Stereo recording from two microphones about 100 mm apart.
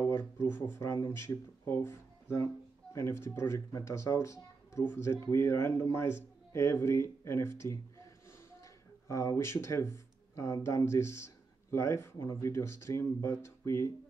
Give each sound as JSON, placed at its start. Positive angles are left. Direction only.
{"t": 0.0, "sound": "speech", "side_deg": 25}
{"t": 9.0, "sound": "speech", "side_deg": 30}